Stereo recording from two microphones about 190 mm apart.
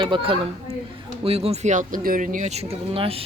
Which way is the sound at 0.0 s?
25° right (ahead or behind).